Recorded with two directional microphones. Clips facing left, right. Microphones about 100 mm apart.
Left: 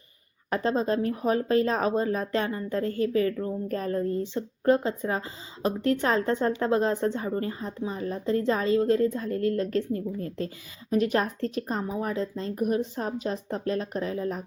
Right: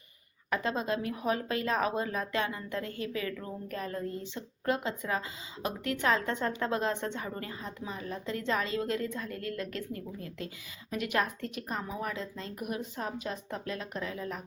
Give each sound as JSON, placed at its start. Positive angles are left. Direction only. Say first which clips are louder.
{"t": 0.5, "sound": "speech", "louder": "left 6 dB", "side_deg": 35}